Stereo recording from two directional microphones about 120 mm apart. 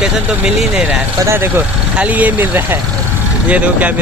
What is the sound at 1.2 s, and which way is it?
Speech, 20° right (ahead or behind).